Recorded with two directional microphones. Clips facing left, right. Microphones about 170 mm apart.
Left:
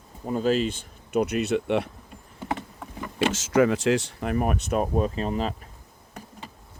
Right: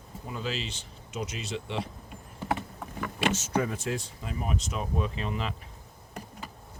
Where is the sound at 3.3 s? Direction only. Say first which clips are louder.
Left 9 dB; 90° left; by 5.7 s 40° left (ahead or behind).